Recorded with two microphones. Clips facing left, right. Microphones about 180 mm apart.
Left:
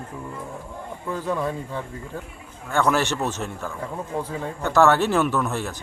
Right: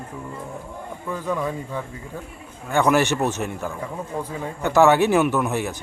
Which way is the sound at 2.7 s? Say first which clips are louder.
Right 3 dB; 15° right (ahead or behind).